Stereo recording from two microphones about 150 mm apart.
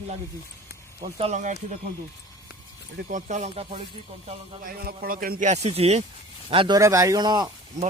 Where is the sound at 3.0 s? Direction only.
60° right (ahead or behind); by 3.8 s 40° right (ahead or behind).